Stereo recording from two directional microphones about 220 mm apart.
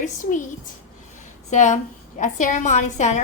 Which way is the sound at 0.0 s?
35° left (ahead or behind).